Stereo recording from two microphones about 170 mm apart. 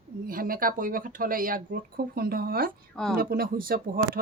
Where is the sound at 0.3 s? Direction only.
55° right (ahead or behind).